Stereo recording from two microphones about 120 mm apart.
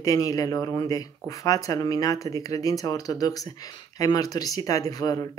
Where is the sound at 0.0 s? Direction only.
30° left (ahead or behind).